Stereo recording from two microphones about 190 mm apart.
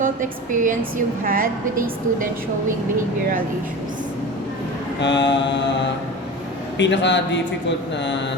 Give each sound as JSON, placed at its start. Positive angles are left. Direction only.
{"t": 0.0, "sound": "a woman's voice", "side_deg": -45}
{"t": 4.9, "sound": "speech", "side_deg": 70}
{"t": 6.7, "sound": "speech", "side_deg": 70}